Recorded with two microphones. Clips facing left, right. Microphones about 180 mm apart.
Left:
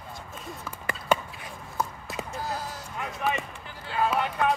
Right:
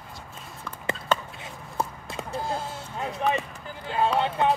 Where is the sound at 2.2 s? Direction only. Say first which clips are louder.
Right 5 dB; 25° right (ahead or behind).